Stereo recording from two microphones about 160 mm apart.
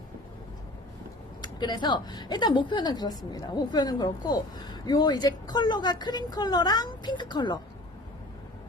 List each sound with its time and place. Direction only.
1.4 s a woman's voice: 25° left (ahead or behind)